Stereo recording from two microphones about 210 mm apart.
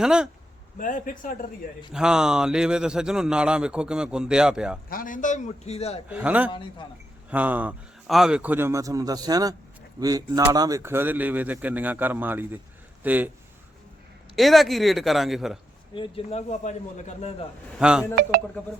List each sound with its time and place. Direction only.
0.0 s speech: 5° right (ahead or behind)
0.8 s a man's voice: 40° left (ahead or behind)
1.9 s speech: 5° right (ahead or behind)
4.9 s a man's voice: 40° left (ahead or behind)
6.1 s speech: 5° right (ahead or behind)
14.3 s speech: centre (ahead or behind)
16.0 s a man's voice: 30° left (ahead or behind)
17.7 s speech: 5° right (ahead or behind)
18.1 s speech: 45° right (ahead or behind)